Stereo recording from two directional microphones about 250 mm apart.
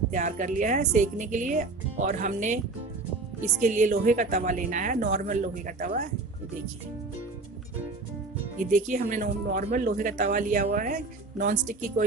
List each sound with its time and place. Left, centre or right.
0.1 s a woman's voice: right
3.6 s speech: right
8.5 s speech: right